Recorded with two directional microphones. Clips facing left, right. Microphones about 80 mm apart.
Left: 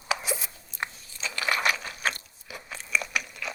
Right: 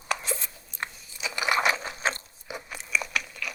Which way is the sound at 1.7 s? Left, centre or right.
Right.